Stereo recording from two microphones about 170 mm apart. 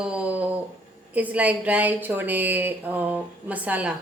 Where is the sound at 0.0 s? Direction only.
5° right (ahead or behind).